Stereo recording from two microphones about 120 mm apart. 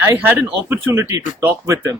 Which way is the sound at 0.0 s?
20° right (ahead or behind).